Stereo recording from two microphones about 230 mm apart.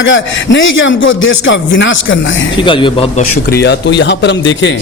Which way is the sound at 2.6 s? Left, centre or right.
Left.